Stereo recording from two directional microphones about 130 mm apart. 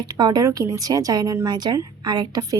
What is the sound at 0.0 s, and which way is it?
A woman's voice, 30° right (ahead or behind).